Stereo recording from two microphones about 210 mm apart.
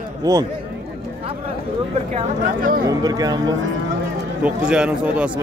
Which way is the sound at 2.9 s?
20° right (ahead or behind).